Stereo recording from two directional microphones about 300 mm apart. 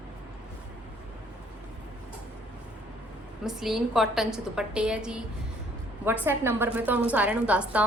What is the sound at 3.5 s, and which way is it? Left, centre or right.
A woman's voice, centre.